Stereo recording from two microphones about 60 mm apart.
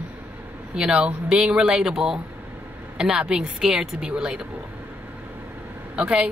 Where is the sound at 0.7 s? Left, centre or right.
Centre.